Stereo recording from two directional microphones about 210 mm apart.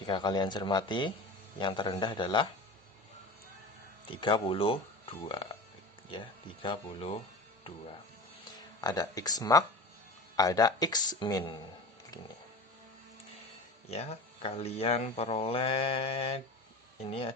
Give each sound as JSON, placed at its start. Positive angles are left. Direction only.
{"t": 0.0, "sound": "speech", "side_deg": 20}
{"t": 4.1, "sound": "speech", "side_deg": 25}
{"t": 8.5, "sound": "speech", "side_deg": 20}
{"t": 13.8, "sound": "speech", "side_deg": 30}